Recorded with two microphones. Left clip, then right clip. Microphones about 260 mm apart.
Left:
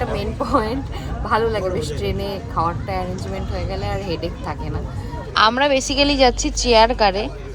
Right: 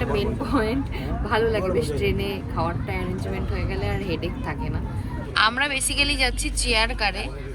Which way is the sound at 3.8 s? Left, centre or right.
Centre.